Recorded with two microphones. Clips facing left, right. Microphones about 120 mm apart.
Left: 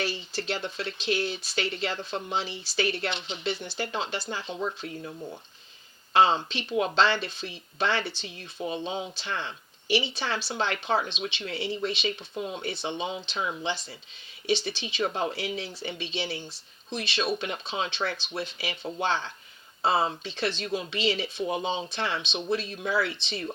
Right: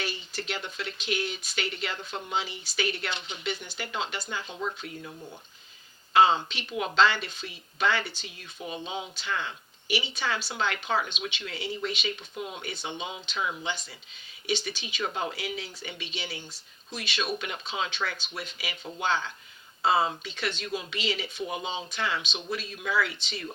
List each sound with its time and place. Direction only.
0.0 s speech: 30° left (ahead or behind)
6.1 s speech: 30° left (ahead or behind)